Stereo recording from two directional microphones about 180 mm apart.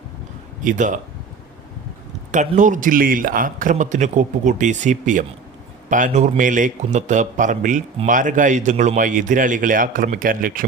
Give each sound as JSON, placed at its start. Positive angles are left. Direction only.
{"t": 0.6, "sound": "a man's voice", "side_deg": -45}
{"t": 2.3, "sound": "a man's voice", "side_deg": -45}